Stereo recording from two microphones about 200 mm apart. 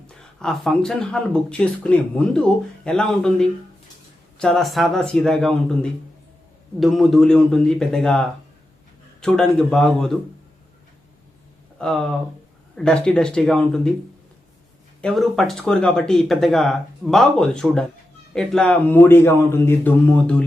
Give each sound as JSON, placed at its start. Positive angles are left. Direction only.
{"t": 0.1, "sound": "speech", "side_deg": 5}
{"t": 11.8, "sound": "speech", "side_deg": 5}
{"t": 15.0, "sound": "a man's voice", "side_deg": 0}